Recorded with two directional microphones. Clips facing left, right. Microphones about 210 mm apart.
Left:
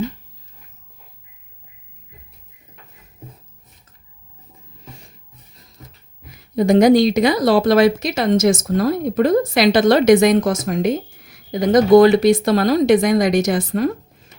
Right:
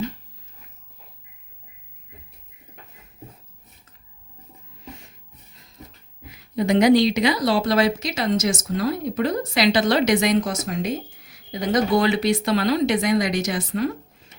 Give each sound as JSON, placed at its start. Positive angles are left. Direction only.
{"t": 6.3, "sound": "speech", "side_deg": 45}